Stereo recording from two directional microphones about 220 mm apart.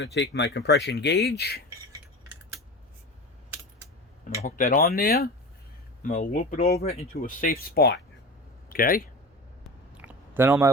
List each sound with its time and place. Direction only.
0.0 s speech: 50° left (ahead or behind)
4.4 s speech: 40° left (ahead or behind)
9.6 s a sound: 5° right (ahead or behind)